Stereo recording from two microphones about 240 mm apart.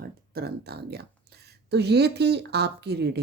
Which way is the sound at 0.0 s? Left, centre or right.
Right.